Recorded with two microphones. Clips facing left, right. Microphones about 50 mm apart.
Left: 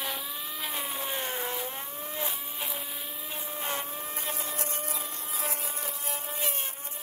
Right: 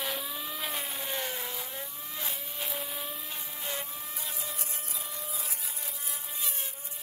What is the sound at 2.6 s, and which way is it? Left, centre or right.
Vehicle, centre.